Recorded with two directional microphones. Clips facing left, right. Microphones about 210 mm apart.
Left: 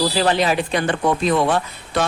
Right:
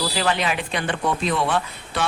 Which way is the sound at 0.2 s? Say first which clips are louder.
Left 4 dB; 35° left (ahead or behind).